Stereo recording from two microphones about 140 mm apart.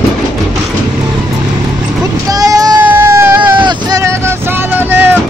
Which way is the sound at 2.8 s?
15° right (ahead or behind).